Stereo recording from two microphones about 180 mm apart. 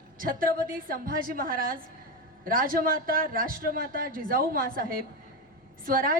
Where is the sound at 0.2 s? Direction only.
50° right (ahead or behind).